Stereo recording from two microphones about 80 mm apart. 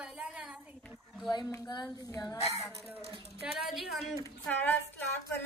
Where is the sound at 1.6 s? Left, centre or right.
Left.